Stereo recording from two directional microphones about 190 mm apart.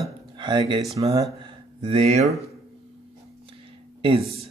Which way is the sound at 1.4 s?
30° right (ahead or behind).